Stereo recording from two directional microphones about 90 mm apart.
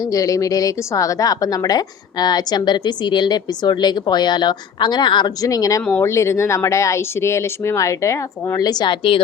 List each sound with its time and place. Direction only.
0.0 s a woman's voice: 40° left (ahead or behind); by 9.2 s 70° left (ahead or behind)